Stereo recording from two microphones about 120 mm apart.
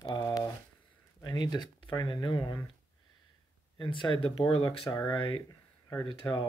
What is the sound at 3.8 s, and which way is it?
Speech, 45° left (ahead or behind).